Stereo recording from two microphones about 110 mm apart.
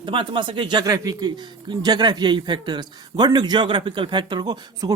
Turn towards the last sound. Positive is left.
turn(degrees=-40)  # may be behind; listen again after turning